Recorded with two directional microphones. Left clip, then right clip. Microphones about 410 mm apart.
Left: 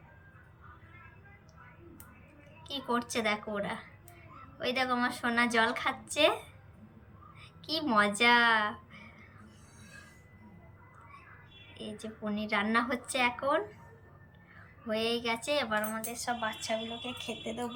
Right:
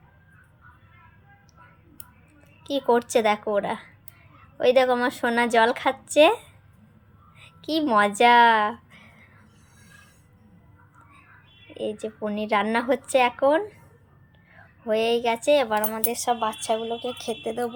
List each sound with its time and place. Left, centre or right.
2.6 s a woman's voice: centre
7.3 s a sound: centre
11.7 s a woman's voice: centre
16.4 s speech: right